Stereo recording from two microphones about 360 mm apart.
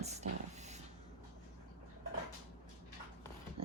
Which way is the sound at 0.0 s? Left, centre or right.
Centre.